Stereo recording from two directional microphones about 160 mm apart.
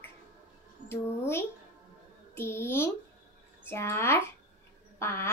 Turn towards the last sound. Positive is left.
turn(degrees=15)  # may be behind; listen again after turning